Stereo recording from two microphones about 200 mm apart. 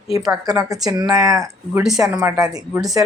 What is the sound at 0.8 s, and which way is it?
Speech, 20° right (ahead or behind).